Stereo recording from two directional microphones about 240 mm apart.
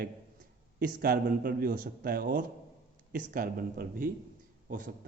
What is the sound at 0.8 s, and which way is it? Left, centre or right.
Speech, right.